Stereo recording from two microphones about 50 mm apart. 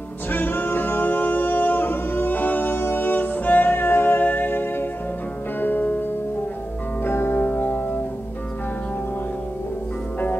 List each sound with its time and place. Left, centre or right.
0.3 s music: left
2.7 s music: left
4.2 s music: left
7.1 s music: left